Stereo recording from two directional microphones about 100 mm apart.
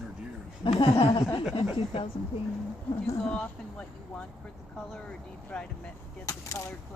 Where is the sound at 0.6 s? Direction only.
60° left (ahead or behind).